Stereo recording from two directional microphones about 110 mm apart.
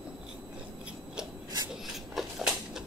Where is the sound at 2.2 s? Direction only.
5° right (ahead or behind).